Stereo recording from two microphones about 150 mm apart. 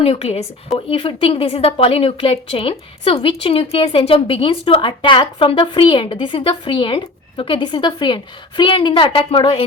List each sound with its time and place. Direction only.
0.0 s a woman's voice: 40° left (ahead or behind)